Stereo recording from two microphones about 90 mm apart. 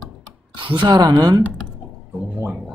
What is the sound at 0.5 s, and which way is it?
Speech, 65° right (ahead or behind).